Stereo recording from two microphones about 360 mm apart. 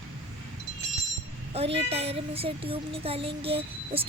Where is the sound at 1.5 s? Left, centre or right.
Centre.